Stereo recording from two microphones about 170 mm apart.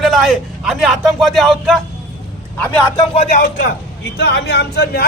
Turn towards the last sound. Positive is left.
turn(degrees=75)  # may be behind; listen again after turning